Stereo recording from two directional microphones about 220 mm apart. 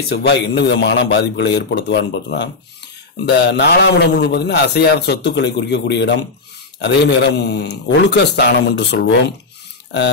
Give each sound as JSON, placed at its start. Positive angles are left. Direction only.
{"t": 0.1, "sound": "a man's voice", "side_deg": 50}